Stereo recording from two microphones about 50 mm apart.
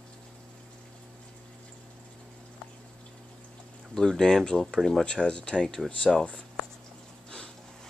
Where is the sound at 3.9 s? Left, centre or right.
Centre.